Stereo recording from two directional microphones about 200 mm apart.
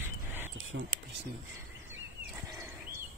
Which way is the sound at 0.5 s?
90° right.